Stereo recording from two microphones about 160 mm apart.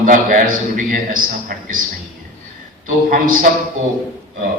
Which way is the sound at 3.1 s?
60° right (ahead or behind).